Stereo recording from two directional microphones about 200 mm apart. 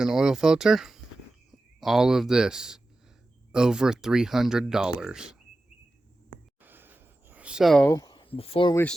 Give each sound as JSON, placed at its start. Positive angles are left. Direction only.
{"t": 0.0, "sound": "speech", "side_deg": -5}
{"t": 6.6, "sound": "a sound", "side_deg": -10}
{"t": 7.9, "sound": "speech", "side_deg": 20}
{"t": 8.7, "sound": "speech", "side_deg": 5}